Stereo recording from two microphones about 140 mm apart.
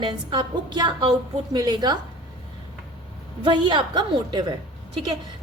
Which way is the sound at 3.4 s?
35° right (ahead or behind).